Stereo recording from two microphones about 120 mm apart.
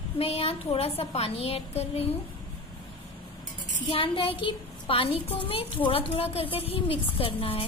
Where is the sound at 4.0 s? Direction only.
45° left (ahead or behind).